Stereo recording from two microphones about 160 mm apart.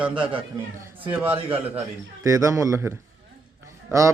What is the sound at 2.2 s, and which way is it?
A man's voice, 20° right (ahead or behind).